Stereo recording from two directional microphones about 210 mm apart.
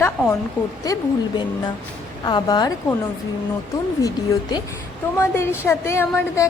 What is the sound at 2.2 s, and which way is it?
Speech, 20° left (ahead or behind).